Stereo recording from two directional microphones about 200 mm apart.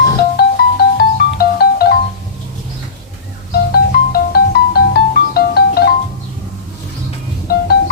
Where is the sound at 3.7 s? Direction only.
50° left (ahead or behind).